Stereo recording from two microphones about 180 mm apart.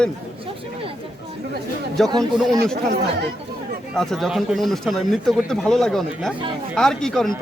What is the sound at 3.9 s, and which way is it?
Speech, centre (ahead or behind).